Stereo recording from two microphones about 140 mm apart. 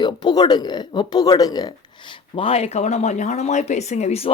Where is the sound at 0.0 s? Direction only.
30° left (ahead or behind).